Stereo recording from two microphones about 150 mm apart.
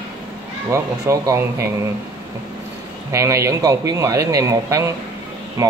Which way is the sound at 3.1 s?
20° right (ahead or behind).